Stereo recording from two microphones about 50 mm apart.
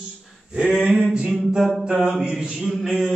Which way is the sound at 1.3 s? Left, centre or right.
Centre.